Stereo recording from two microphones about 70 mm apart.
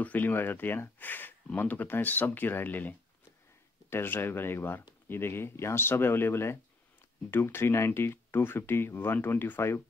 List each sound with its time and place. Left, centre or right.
0.0 s speech: left